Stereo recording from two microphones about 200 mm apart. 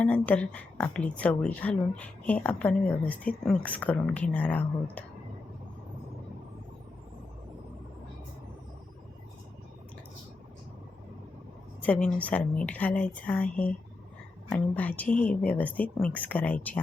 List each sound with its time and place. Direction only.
0.0 s a woman's voice: 5° left (ahead or behind)
11.8 s a woman's voice: 5° left (ahead or behind)